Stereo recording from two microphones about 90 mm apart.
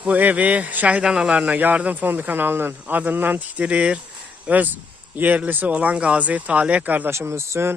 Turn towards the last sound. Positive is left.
turn(degrees=-30)  # may be behind; listen again after turning